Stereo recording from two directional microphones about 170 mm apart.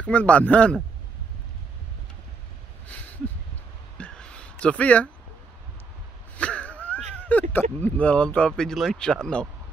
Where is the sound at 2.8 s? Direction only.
10° left (ahead or behind).